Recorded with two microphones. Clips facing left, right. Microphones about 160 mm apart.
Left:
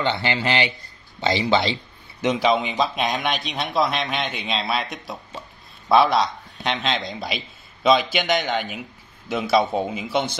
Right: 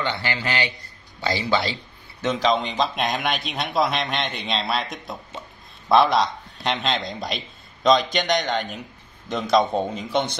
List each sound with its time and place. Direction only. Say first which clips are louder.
0.0 s a man's voice: left 4 dB; 25° left (ahead or behind)
2.2 s a man's voice: left 2 dB; 10° left (ahead or behind)